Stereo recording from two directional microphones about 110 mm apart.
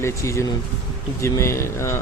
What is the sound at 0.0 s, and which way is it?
Speech, 25° left (ahead or behind).